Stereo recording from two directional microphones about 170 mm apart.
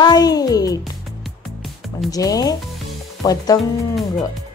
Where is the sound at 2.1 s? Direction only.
20° left (ahead or behind).